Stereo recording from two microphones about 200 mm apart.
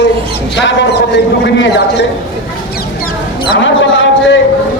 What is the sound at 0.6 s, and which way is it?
Speech, 60° left (ahead or behind).